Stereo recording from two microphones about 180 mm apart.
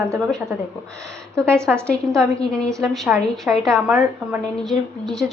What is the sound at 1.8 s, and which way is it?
Speech, 5° left (ahead or behind).